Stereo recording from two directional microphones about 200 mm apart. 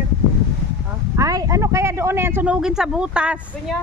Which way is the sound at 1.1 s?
15° right (ahead or behind).